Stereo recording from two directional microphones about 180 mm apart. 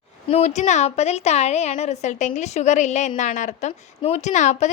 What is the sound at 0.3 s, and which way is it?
A woman's voice, 35° left (ahead or behind).